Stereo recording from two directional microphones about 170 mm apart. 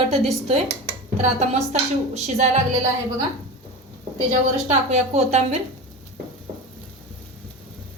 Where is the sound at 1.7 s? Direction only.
40° right (ahead or behind).